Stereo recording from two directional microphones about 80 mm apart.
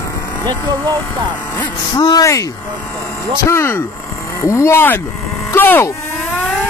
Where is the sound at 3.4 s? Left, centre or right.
Left.